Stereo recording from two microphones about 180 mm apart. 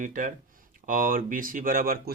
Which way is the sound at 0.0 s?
50° right (ahead or behind).